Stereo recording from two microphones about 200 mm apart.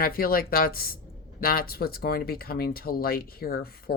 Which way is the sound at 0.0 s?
45° left (ahead or behind).